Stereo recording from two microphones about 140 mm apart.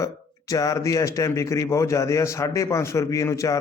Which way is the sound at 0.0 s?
25° left (ahead or behind).